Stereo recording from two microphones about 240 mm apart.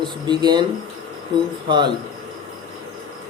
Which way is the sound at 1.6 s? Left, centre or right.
Centre.